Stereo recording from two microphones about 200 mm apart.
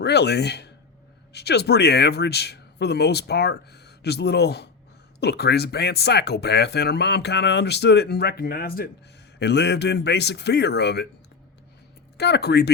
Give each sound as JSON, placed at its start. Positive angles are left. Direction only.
{"t": 0.0, "sound": "speech", "side_deg": 55}
{"t": 9.4, "sound": "speech", "side_deg": 60}
{"t": 12.1, "sound": "speech", "side_deg": 55}